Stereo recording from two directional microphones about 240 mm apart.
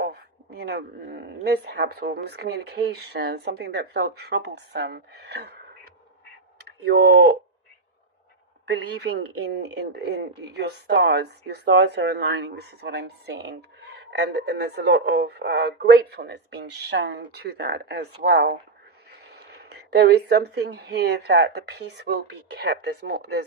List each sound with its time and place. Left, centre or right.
0.0 s speech: right
6.8 s speech: right
8.6 s speech: right
19.7 s speech: right